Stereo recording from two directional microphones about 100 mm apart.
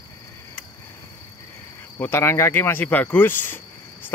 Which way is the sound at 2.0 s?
25° left (ahead or behind).